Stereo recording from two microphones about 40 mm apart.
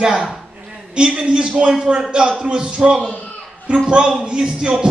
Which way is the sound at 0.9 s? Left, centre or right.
Right.